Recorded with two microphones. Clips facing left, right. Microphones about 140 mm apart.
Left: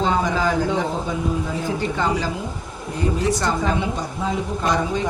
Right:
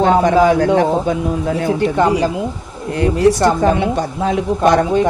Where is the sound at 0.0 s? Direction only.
65° right (ahead or behind).